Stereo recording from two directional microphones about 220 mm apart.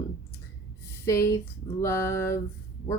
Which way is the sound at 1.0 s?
10° left (ahead or behind).